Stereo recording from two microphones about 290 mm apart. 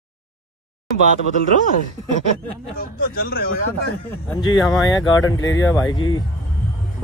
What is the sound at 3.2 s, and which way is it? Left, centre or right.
Speech, left.